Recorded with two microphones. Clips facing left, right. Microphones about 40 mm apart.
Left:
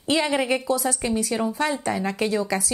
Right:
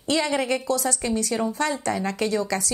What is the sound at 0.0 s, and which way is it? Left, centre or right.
A woman's voice, centre.